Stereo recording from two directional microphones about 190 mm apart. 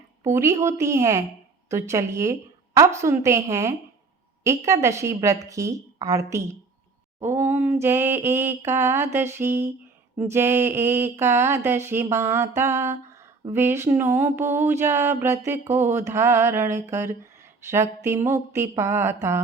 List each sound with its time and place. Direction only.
0.3 s mantra: 15° right (ahead or behind)